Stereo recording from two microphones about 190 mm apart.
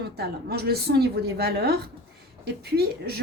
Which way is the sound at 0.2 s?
55° right (ahead or behind).